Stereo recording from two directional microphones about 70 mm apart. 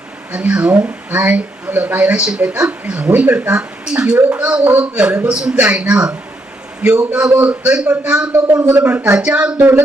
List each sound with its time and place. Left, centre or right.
0.3 s speech: centre
8.4 s speech: right
8.6 s speech: right
9.1 s speech: centre